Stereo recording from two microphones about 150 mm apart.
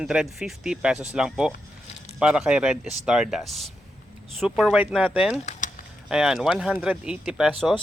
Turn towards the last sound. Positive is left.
turn(degrees=0)  # may be behind; listen again after turning